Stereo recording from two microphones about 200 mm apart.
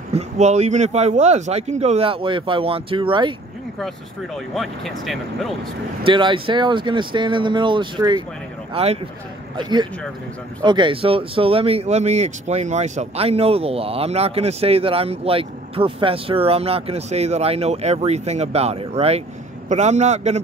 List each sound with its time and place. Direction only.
0.1 s speech: 35° right (ahead or behind)
4.6 s speech: centre (ahead or behind)
6.0 s speech: 25° right (ahead or behind)